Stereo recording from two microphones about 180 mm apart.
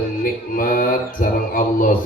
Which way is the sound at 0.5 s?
50° left (ahead or behind).